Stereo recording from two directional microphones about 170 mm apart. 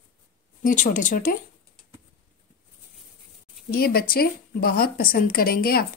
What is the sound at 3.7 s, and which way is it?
A woman's voice, 65° left (ahead or behind).